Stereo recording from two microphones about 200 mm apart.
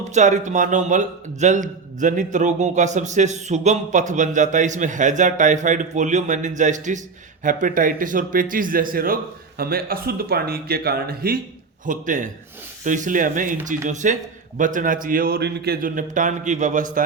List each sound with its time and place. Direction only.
0.1 s a man's voice: 35° right (ahead or behind)